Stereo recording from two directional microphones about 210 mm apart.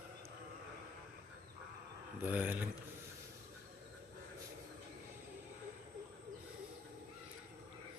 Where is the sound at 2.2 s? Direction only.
10° right (ahead or behind).